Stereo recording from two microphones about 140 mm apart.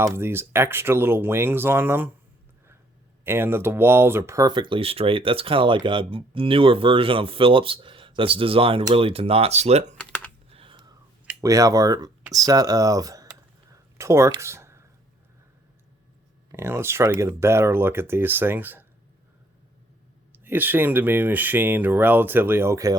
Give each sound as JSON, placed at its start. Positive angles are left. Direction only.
{"t": 0.0, "sound": "speech", "side_deg": -15}
{"t": 3.2, "sound": "speech", "side_deg": -15}
{"t": 10.5, "sound": "a sound", "side_deg": -40}
{"t": 11.3, "sound": "speech", "side_deg": -25}
{"t": 13.7, "sound": "a sound", "side_deg": -20}
{"t": 16.5, "sound": "speech", "side_deg": -20}
{"t": 20.3, "sound": "speech", "side_deg": -15}